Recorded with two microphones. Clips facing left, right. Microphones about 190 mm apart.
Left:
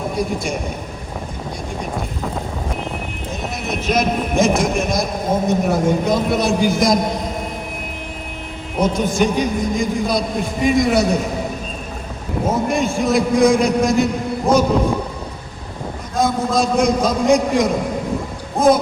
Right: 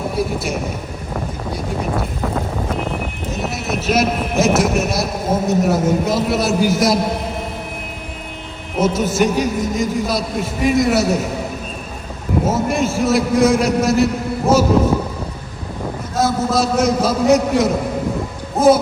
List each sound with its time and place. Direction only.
0.2 s speech: 5° right (ahead or behind)
1.8 s a sound: 5° right (ahead or behind)
3.3 s speech: 5° right (ahead or behind)
8.8 s speech: 5° right (ahead or behind)
12.5 s speech: 5° right (ahead or behind)
16.1 s speech: 5° right (ahead or behind)
18.6 s a sound: 5° right (ahead or behind)